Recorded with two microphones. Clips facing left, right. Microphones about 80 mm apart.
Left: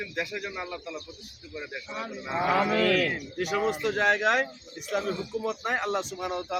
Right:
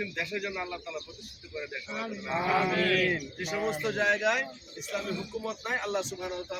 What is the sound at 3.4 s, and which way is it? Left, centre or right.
A man's voice, left.